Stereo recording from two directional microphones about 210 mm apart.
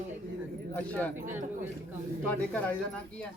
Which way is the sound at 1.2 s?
35° right (ahead or behind).